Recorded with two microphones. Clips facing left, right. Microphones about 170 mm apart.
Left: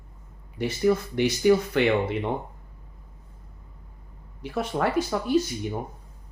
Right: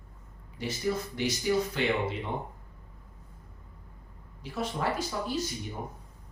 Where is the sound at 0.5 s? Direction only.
60° left (ahead or behind).